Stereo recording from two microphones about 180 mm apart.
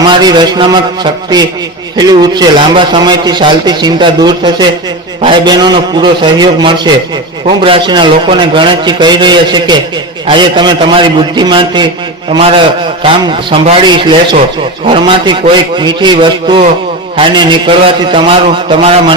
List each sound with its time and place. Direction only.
0.1 s speech: 25° right (ahead or behind)